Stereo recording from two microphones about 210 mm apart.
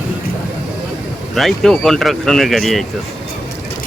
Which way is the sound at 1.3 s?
Centre (ahead or behind).